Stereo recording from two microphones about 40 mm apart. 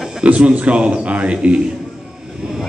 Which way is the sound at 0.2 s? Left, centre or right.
Right.